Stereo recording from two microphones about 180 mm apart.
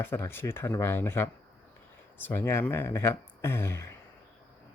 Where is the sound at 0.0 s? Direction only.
10° left (ahead or behind).